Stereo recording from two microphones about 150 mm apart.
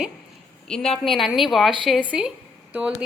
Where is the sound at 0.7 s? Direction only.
5° left (ahead or behind).